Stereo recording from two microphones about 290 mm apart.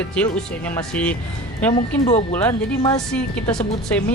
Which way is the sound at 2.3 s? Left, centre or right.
Centre.